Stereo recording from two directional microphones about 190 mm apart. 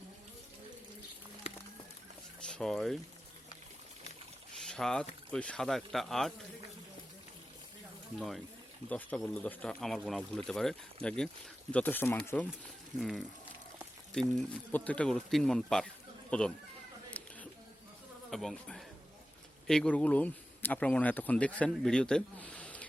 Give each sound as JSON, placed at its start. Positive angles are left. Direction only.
{"t": 1.5, "sound": "a sound", "side_deg": 30}
{"t": 2.5, "sound": "speech", "side_deg": 5}
{"t": 4.7, "sound": "speech", "side_deg": 5}
{"t": 8.9, "sound": "speech", "side_deg": 10}
{"t": 13.0, "sound": "speech", "side_deg": 0}
{"t": 17.2, "sound": "a sound", "side_deg": 10}
{"t": 18.3, "sound": "speech", "side_deg": 0}